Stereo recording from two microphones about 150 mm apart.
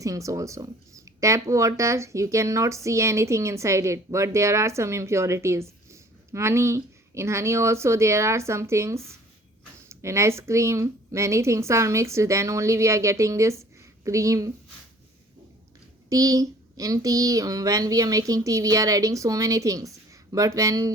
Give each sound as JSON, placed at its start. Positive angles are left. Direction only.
{"t": 0.0, "sound": "speech", "side_deg": -20}
{"t": 16.0, "sound": "speech", "side_deg": -20}